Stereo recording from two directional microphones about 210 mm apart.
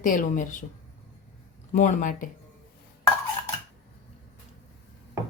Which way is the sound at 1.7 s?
35° left (ahead or behind).